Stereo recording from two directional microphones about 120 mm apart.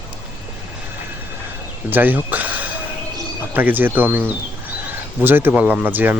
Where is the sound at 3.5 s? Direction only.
15° right (ahead or behind).